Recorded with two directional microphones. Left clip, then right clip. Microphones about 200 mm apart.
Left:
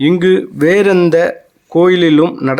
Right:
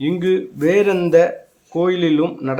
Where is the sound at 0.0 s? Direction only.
35° left (ahead or behind).